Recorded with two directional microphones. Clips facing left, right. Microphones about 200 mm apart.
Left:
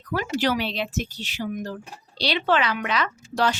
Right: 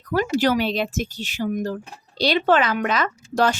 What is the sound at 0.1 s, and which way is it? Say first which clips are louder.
Speech: right 4 dB; 40° right (ahead or behind).